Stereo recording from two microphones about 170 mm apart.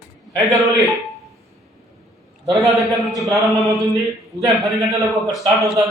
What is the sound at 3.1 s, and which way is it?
Mantra, 20° right (ahead or behind).